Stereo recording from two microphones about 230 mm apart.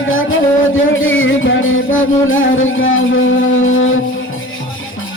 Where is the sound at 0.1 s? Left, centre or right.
Left.